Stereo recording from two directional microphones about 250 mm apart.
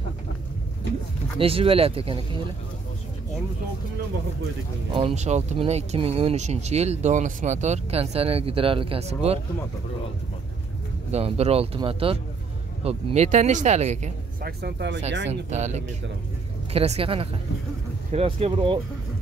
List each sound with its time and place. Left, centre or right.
1.4 s speech: right
4.9 s speech: right
11.1 s speech: right
14.6 s speech: right
15.5 s speech: right